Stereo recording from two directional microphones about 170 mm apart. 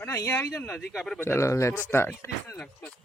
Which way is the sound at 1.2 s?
15° left (ahead or behind).